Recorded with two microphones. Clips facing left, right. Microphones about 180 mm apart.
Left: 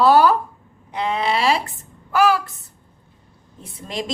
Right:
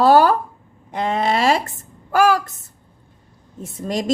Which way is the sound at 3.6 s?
45° right (ahead or behind).